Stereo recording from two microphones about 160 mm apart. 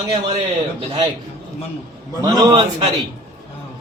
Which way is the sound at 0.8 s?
25° right (ahead or behind).